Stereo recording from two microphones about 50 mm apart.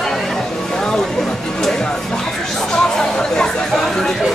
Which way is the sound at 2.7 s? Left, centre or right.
Centre.